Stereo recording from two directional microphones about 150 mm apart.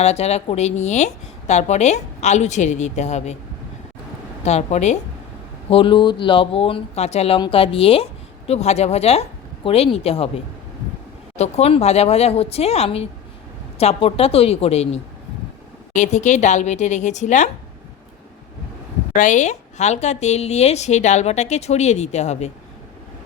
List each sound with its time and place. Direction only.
0.0 s a woman's voice: 45° left (ahead or behind)
4.4 s a woman's voice: 50° left (ahead or behind)
5.7 s a woman's voice: 35° left (ahead or behind); by 17.5 s 55° left (ahead or behind)
19.1 s a woman's voice: 60° left (ahead or behind)